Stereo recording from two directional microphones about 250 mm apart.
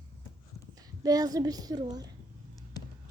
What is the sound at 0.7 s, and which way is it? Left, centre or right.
A woman's voice, centre.